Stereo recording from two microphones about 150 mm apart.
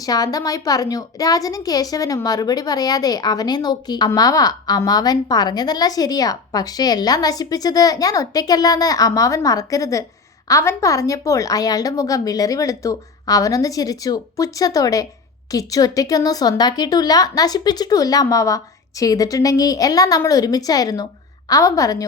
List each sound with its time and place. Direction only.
0.0 s a woman's voice: 25° left (ahead or behind)